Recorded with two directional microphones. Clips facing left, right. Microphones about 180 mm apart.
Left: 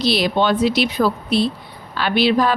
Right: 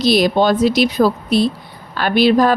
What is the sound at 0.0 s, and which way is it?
A woman's voice, 45° right (ahead or behind).